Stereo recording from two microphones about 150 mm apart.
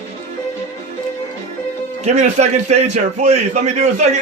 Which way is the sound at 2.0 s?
50° right (ahead or behind).